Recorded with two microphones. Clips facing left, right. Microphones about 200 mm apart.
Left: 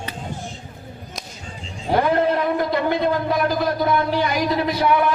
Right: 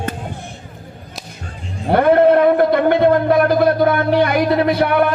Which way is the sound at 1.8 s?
60° right (ahead or behind).